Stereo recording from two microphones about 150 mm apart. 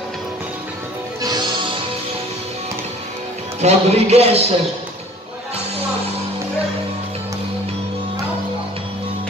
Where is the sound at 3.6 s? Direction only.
45° right (ahead or behind).